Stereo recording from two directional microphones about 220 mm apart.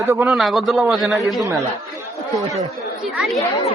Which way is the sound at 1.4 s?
15° right (ahead or behind).